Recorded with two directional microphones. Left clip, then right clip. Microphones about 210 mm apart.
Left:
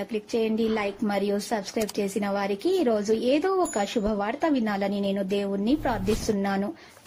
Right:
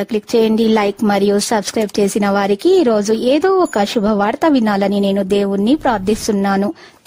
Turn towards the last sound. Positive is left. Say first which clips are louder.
# right 11 dB
turn(degrees=-50)  # may be behind; listen again after turning